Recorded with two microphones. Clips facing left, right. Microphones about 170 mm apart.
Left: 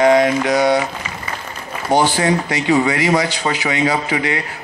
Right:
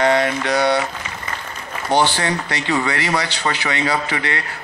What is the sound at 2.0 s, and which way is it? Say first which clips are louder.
Speech: left 3 dB; 10° left (ahead or behind).